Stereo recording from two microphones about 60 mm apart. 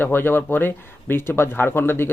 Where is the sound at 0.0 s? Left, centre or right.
Left.